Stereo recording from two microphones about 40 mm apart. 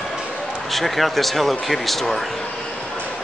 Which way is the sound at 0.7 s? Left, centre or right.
Centre.